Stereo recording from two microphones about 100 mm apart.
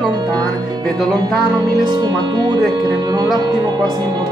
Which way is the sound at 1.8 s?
50° right (ahead or behind).